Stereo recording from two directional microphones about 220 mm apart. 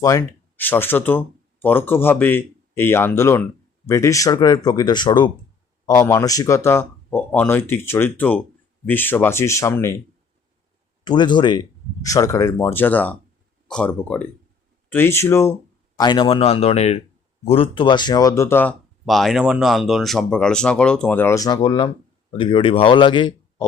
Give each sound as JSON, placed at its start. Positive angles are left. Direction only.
{"t": 0.0, "sound": "speech", "side_deg": 15}
{"t": 11.0, "sound": "speech", "side_deg": 20}